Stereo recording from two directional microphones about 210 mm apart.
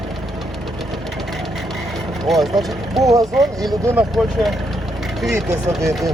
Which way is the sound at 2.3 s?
Centre (ahead or behind).